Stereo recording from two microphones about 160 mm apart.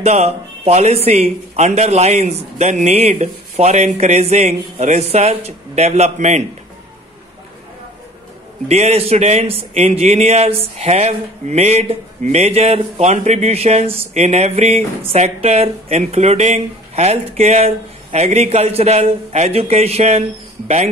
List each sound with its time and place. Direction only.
0.0 s a man's voice: 45° right (ahead or behind)
8.6 s a man's voice: 40° right (ahead or behind)